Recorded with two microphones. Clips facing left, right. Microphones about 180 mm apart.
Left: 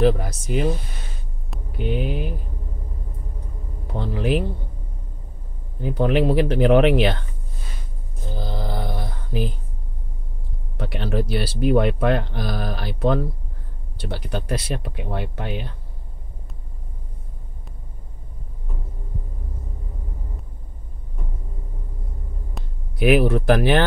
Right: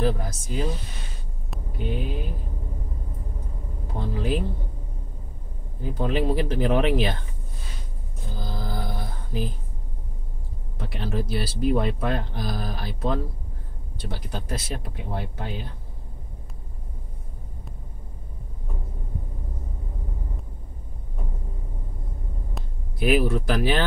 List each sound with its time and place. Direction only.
0.0 s speech: 70° left (ahead or behind)
1.8 s speech: 70° left (ahead or behind)
4.1 s speech: 70° left (ahead or behind)
5.8 s speech: 70° left (ahead or behind)
8.4 s a sound: 70° left (ahead or behind)
9.3 s speech: 70° left (ahead or behind)
10.8 s speech: 70° left (ahead or behind)
22.9 s speech: 65° left (ahead or behind)